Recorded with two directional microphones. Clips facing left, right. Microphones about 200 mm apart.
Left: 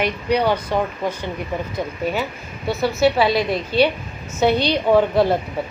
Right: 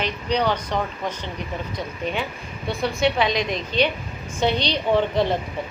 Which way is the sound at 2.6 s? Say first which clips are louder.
Left 4 dB; 5° left (ahead or behind).